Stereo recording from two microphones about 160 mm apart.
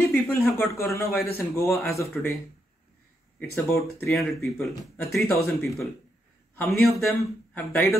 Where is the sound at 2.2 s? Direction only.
5° left (ahead or behind).